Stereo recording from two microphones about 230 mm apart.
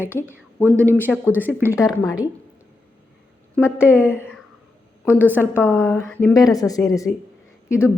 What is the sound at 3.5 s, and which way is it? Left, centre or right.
Speech, centre.